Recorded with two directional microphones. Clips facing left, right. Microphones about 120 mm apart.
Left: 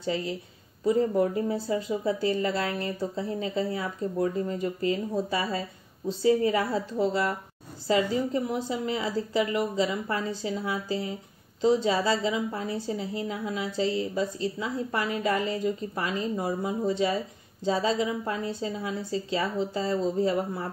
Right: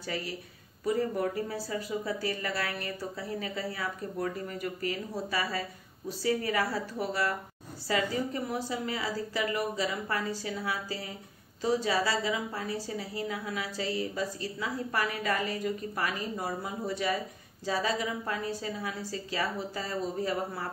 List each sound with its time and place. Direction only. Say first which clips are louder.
0.0 s speech: left 6 dB; 25° left (ahead or behind)